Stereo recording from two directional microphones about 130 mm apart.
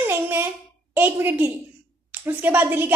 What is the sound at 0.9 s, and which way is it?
A woman's voice, 15° right (ahead or behind).